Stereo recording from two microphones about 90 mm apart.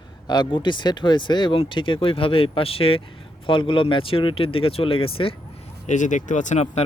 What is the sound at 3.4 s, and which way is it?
Speech, 75° left (ahead or behind).